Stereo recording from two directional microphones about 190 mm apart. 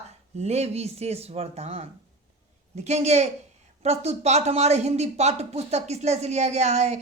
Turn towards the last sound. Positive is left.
turn(degrees=-35)  # may be behind; listen again after turning